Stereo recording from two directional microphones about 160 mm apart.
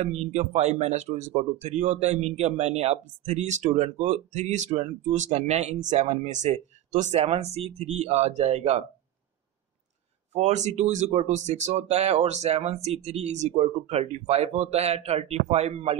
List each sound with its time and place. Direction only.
0.0 s speech: 45° right (ahead or behind)
10.3 s speech: 45° right (ahead or behind)